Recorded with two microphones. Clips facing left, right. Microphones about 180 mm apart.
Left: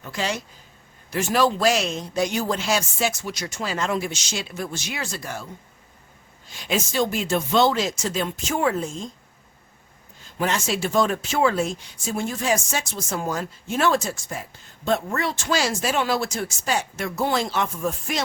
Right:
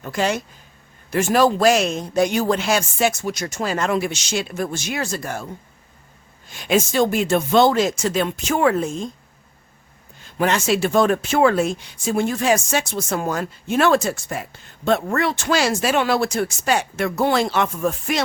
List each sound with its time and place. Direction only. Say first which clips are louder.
0.0 s speech: right 6 dB; 55° right (ahead or behind)
6.5 s speech: right 6 dB; 55° right (ahead or behind)
10.2 s speech: right 5 dB; 65° right (ahead or behind)